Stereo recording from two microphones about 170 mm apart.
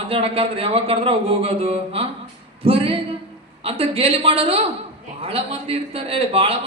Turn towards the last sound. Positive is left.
turn(degrees=-35)  # may be behind; listen again after turning